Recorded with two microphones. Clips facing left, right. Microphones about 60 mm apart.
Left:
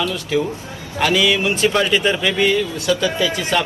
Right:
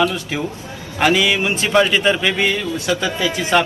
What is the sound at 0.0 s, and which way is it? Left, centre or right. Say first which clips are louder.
A man's voice: right 1 dB; right.